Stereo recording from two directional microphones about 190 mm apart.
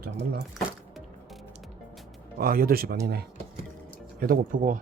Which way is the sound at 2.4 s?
50° right (ahead or behind).